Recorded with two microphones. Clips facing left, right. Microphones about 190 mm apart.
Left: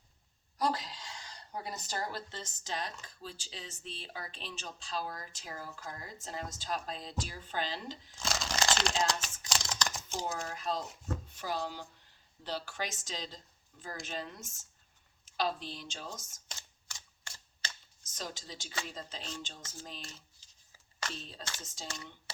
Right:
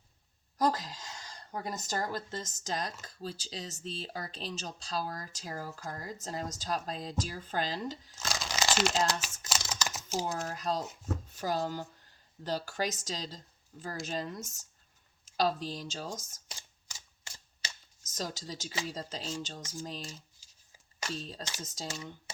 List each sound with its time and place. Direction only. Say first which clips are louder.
0.6 s speech: right 3 dB; 45° right (ahead or behind)
8.2 s crumpling: even; centre (ahead or behind)
9.5 s computer keyboard: even; 5° right (ahead or behind)
10.3 s speech: right 3 dB; 40° right (ahead or behind)
16.9 s a sound: even; 15° right (ahead or behind)
18.0 s speech: right 5 dB; 40° right (ahead or behind)
20.4 s a sound: right 1 dB; 10° right (ahead or behind)
21.1 s speech: right 5 dB; 40° right (ahead or behind)